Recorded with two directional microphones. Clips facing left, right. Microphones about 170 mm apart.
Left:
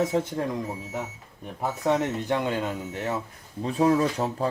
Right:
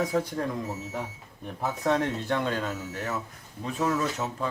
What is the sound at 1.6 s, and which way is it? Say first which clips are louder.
Speech: left 1 dB; 10° left (ahead or behind).